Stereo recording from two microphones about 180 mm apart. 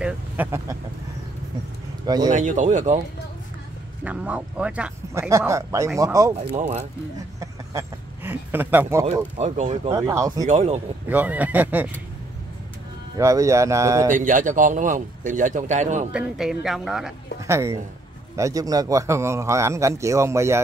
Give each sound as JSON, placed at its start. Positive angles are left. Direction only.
{"t": 0.0, "sound": "speech", "side_deg": -10}
{"t": 2.0, "sound": "a man's voice", "side_deg": -20}
{"t": 2.3, "sound": "speech", "side_deg": -40}
{"t": 4.0, "sound": "a man's voice", "side_deg": -5}
{"t": 6.5, "sound": "speech", "side_deg": -35}
{"t": 7.3, "sound": "a sound", "side_deg": -15}
{"t": 9.7, "sound": "speech", "side_deg": -25}
{"t": 10.4, "sound": "speech", "side_deg": -40}
{"t": 11.1, "sound": "a man's voice", "side_deg": -10}
{"t": 13.2, "sound": "a man's voice", "side_deg": -15}
{"t": 14.1, "sound": "speech", "side_deg": -45}
{"t": 16.1, "sound": "speech", "side_deg": -5}
{"t": 17.4, "sound": "a man's voice", "side_deg": -15}